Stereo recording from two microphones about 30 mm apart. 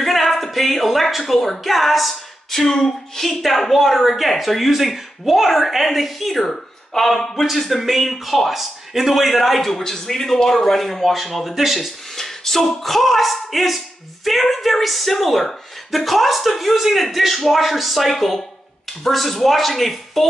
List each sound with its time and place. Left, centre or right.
0.0 s speech: centre
2.5 s speech: centre
12.2 s speech: centre
16.7 s speech: centre
17.0 s speech: centre